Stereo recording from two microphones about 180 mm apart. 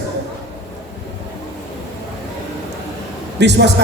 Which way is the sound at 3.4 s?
75° right (ahead or behind).